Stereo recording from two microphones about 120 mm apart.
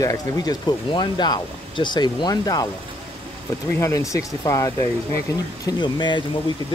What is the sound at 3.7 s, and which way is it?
Speech, 25° left (ahead or behind).